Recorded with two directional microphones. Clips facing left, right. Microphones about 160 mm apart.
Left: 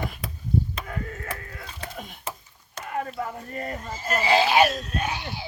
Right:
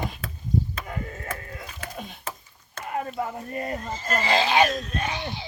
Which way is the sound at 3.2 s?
20° right (ahead or behind).